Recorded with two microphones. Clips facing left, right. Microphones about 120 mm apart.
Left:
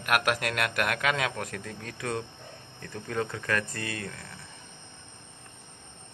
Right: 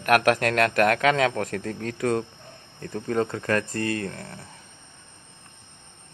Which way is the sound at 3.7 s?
45° right (ahead or behind).